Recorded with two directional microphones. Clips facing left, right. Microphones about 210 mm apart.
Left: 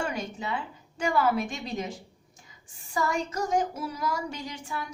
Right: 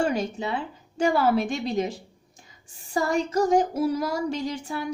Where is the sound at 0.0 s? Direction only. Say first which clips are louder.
Right 7 dB; 30° right (ahead or behind).